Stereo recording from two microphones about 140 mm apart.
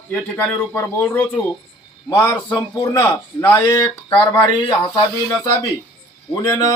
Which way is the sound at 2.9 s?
15° left (ahead or behind).